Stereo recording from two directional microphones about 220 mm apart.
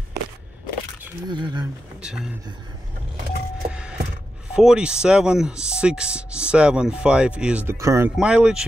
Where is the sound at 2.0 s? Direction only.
Centre (ahead or behind).